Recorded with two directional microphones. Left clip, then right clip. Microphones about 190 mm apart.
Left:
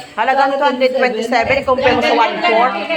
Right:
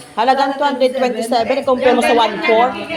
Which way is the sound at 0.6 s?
30° right (ahead or behind).